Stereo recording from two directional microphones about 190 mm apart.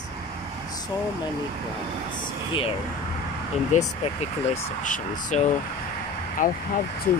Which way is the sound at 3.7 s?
40° left (ahead or behind).